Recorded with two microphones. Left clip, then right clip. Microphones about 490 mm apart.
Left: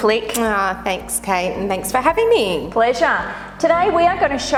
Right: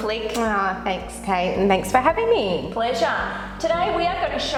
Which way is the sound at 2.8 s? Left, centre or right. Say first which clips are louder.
Left 7 dB; left.